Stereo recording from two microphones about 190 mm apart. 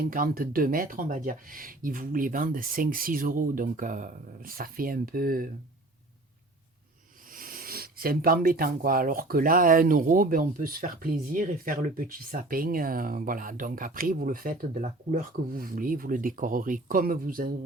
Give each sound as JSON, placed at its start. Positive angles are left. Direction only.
{"t": 0.0, "sound": "speech", "side_deg": -50}
{"t": 7.3, "sound": "speech", "side_deg": -50}